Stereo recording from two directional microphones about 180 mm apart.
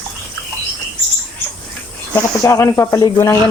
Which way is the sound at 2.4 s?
15° left (ahead or behind).